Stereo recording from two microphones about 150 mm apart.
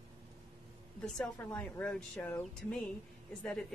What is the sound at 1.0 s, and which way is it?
Speech, 5° left (ahead or behind).